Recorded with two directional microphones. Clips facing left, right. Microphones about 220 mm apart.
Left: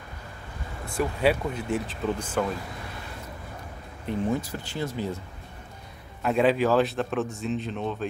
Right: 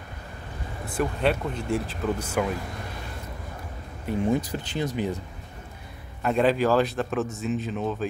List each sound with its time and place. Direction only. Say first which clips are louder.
0.9 s speech: left 1 dB; 5° left (ahead or behind)
4.3 s speech: right 3 dB; 20° right (ahead or behind)
6.2 s speech: even; centre (ahead or behind)